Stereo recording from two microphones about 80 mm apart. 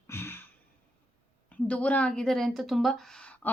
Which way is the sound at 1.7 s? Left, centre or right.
Centre.